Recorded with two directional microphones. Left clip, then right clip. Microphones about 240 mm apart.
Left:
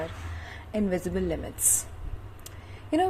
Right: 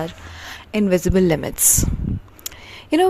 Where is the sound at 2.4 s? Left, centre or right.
Right.